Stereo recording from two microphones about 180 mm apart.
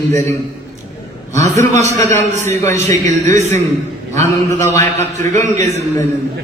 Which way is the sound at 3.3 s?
15° left (ahead or behind).